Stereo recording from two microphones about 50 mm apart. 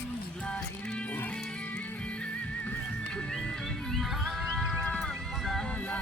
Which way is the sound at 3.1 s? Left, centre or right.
Centre.